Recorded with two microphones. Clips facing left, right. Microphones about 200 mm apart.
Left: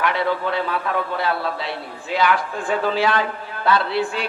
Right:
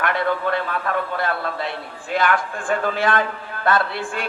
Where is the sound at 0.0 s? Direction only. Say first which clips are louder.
Even; 50° right (ahead or behind).